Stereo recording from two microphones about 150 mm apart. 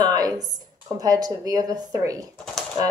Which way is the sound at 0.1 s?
25° right (ahead or behind).